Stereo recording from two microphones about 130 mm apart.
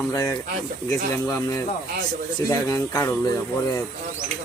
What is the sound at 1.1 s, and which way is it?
Speech, 25° left (ahead or behind).